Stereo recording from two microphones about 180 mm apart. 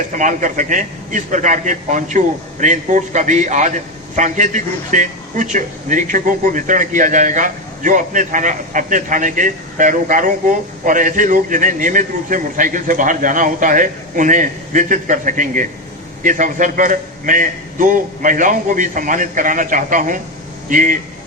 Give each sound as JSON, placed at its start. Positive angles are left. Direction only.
{"t": 0.2, "sound": "a man's voice", "side_deg": -45}